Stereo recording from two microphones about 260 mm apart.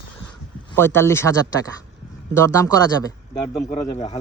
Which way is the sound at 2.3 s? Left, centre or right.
Centre.